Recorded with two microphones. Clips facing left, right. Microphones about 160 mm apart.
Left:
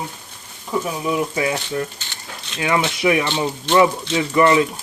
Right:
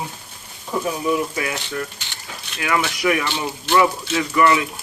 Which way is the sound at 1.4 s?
25° left (ahead or behind).